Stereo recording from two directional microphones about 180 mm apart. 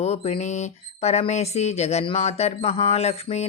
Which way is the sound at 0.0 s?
35° left (ahead or behind).